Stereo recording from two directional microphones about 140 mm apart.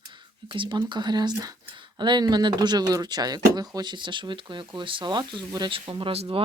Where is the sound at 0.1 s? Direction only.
35° right (ahead or behind).